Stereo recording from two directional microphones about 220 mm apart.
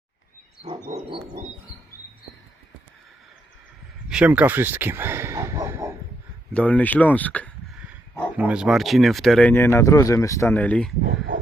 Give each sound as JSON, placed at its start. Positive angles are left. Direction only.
{"t": 0.9, "sound": "dog", "side_deg": -15}
{"t": 4.1, "sound": "speech", "side_deg": -5}
{"t": 6.5, "sound": "speech", "side_deg": 5}
{"t": 8.4, "sound": "speech", "side_deg": -5}